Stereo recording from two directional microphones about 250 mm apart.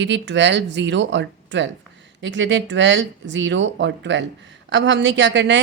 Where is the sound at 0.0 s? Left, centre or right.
Right.